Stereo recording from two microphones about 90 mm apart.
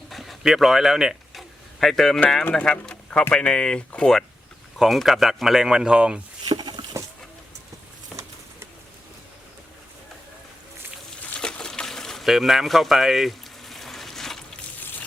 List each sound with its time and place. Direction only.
0.1 s a sound: centre (ahead or behind)
2.5 s speech: 10° left (ahead or behind)
4.8 s speech: centre (ahead or behind)
6.6 s patter: 55° right (ahead or behind)
8.1 s pigeon: centre (ahead or behind)
11.3 s a sound: 10° left (ahead or behind)